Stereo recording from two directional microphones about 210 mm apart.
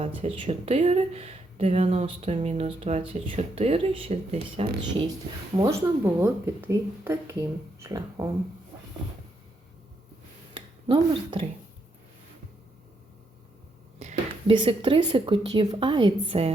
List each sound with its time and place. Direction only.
0.0 s speech: 25° right (ahead or behind)
6.1 s speech: 10° right (ahead or behind)
10.5 s a sound: 25° right (ahead or behind)
14.0 s a woman's voice: 30° right (ahead or behind)